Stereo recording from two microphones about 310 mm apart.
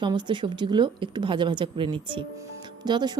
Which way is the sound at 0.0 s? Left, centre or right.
Centre.